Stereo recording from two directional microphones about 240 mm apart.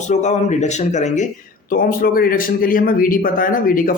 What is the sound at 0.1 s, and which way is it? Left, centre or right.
Speech, left.